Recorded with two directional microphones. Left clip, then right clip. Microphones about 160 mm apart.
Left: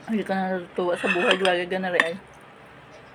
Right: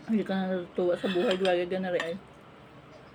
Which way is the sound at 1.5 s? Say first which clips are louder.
Left 4 dB; 15° right (ahead or behind).